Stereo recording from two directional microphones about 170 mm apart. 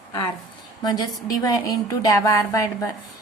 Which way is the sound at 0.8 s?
25° left (ahead or behind).